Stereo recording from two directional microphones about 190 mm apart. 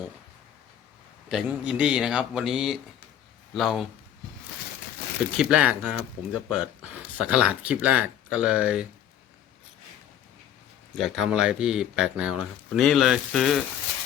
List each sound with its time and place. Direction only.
1.3 s speech: 5° right (ahead or behind)
5.4 s speech: 5° right (ahead or behind)
10.9 s speech: centre (ahead or behind)